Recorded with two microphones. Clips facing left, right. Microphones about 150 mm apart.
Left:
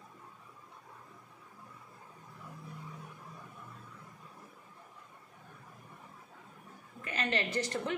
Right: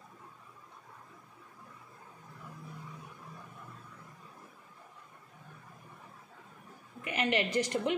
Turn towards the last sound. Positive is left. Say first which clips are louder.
# right 4 dB
turn(degrees=-15)  # may be behind; listen again after turning